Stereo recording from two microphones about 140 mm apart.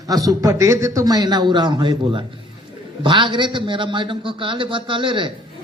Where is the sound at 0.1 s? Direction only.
25° right (ahead or behind).